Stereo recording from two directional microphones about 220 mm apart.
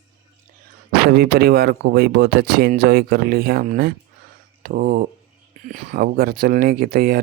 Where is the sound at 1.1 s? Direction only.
45° right (ahead or behind).